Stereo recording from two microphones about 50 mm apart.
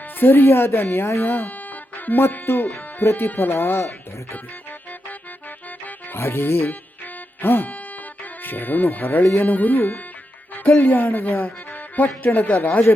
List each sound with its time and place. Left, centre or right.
0.2 s speech: left
1.3 s music: left
2.7 s speech: left
3.5 s speech: left
6.1 s speech: left